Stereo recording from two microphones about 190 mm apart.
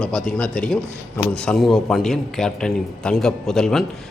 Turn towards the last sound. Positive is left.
turn(degrees=0)  # may be behind; listen again after turning